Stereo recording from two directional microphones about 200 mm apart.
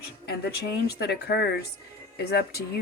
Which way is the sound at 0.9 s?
55° left (ahead or behind).